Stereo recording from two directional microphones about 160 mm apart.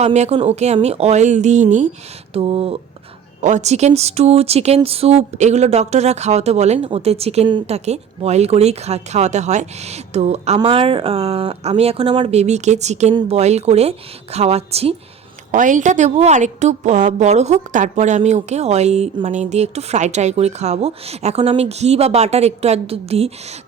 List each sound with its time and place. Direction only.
0.0 s a woman's voice: 45° right (ahead or behind)
2.3 s a woman's voice: 35° right (ahead or behind)
3.4 s a woman's voice: 45° right (ahead or behind)
12.3 s a woman's voice: 45° right (ahead or behind)
15.5 s a woman's voice: 55° right (ahead or behind)